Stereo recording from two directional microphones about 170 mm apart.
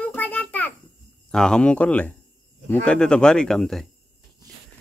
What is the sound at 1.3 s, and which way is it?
Speech, 5° left (ahead or behind).